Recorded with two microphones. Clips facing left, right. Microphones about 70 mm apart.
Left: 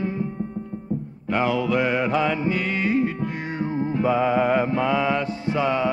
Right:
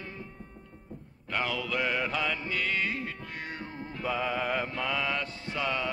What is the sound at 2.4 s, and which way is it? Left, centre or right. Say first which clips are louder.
Music: left 7 dB; centre.